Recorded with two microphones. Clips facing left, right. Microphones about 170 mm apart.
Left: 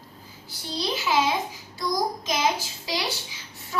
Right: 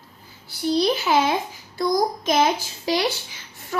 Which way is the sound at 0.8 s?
60° right (ahead or behind).